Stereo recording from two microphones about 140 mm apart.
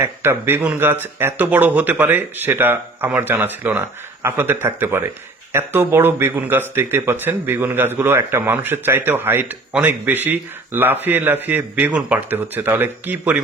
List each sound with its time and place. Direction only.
0.0 s speech: 15° right (ahead or behind)